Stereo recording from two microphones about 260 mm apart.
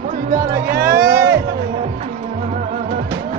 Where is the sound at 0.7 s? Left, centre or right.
Right.